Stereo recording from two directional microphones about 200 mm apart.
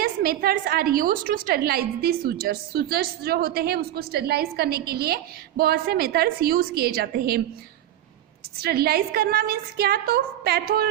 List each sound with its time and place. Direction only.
0.0 s a woman's voice: 50° right (ahead or behind)
8.5 s a woman's voice: 50° right (ahead or behind)